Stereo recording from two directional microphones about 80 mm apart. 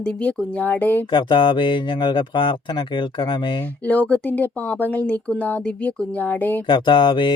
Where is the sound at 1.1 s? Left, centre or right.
Left.